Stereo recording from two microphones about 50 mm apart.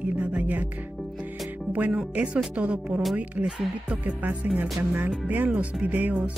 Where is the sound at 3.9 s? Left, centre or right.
Right.